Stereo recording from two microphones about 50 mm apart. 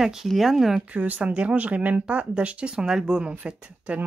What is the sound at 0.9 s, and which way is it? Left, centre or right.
Speech, right.